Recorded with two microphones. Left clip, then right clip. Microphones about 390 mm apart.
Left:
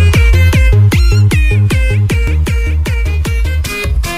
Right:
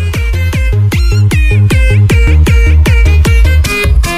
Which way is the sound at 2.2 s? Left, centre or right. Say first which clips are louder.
Right 6 dB; right.